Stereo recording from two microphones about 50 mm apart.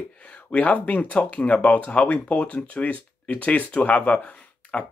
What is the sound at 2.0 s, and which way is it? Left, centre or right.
Speech, left.